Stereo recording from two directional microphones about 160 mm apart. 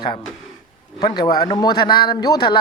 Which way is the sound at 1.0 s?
25° left (ahead or behind).